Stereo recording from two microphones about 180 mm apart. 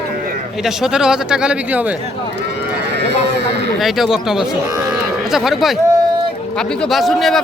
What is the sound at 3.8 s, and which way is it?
Speech, centre (ahead or behind).